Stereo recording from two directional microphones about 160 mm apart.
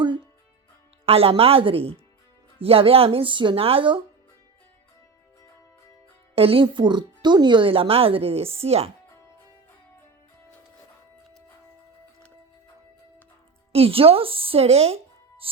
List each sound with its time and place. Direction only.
1.0 s speech: 35° right (ahead or behind)
6.3 s speech: 35° right (ahead or behind)
13.7 s speech: 35° right (ahead or behind)